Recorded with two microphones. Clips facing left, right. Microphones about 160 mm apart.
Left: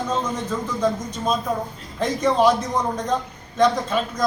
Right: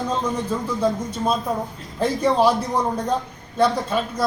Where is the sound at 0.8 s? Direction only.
10° right (ahead or behind).